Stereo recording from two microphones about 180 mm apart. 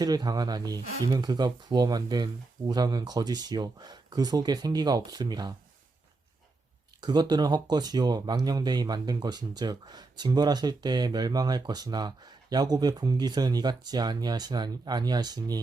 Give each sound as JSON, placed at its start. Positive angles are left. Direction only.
{"t": 0.0, "sound": "speech", "side_deg": -20}
{"t": 7.0, "sound": "speech", "side_deg": -25}